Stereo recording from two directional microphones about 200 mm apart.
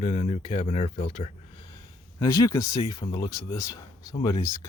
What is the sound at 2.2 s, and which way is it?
Speech, 20° left (ahead or behind).